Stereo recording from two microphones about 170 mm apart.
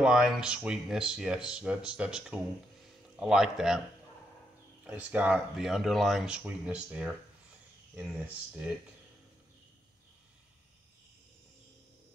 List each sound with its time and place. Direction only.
0.0 s speech: 5° right (ahead or behind)
4.8 s speech: 10° right (ahead or behind)